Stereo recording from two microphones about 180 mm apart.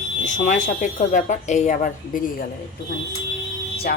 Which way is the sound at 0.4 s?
45° left (ahead or behind).